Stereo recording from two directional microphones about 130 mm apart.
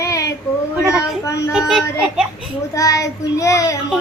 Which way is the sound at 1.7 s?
5° right (ahead or behind).